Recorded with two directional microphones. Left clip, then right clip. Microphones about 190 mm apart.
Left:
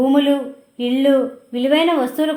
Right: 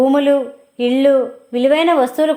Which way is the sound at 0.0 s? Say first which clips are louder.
Right 3 dB; 35° right (ahead or behind).